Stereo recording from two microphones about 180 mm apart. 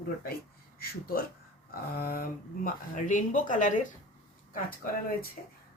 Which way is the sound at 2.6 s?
45° left (ahead or behind).